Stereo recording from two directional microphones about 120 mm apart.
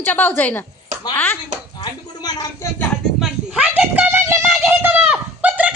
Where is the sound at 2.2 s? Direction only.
35° left (ahead or behind).